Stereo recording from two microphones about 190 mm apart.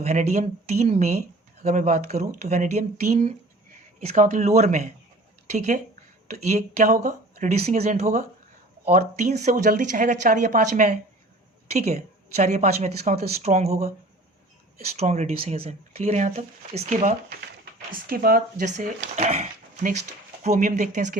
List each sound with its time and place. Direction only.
0.0 s speech: 35° right (ahead or behind)
12.4 s speech: 35° right (ahead or behind)
14.9 s speech: 35° right (ahead or behind)
18.1 s speech: 50° right (ahead or behind)
19.1 s speech: 35° right (ahead or behind)